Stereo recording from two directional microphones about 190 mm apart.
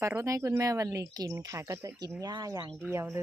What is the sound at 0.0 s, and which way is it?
Speech, 15° right (ahead or behind).